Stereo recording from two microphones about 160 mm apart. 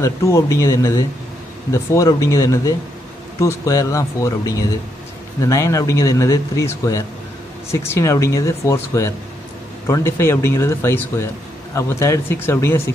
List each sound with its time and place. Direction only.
0.0 s speech: 20° left (ahead or behind)